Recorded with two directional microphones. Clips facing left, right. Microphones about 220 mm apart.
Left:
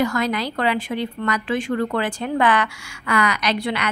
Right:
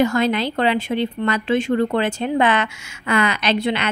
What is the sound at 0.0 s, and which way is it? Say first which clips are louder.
Speech: right 4 dB; 25° right (ahead or behind).